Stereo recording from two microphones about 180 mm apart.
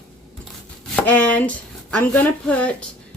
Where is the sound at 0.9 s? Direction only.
10° left (ahead or behind).